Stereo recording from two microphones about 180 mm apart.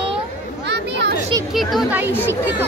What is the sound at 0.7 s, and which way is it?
Chatter, 75° right (ahead or behind).